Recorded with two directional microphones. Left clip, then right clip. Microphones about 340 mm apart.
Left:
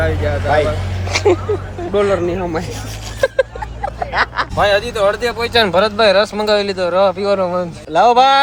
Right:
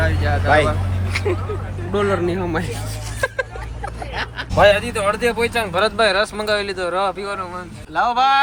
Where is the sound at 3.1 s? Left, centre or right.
Centre.